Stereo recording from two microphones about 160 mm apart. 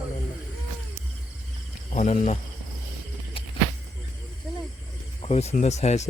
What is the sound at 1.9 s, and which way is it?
Speech, 45° left (ahead or behind).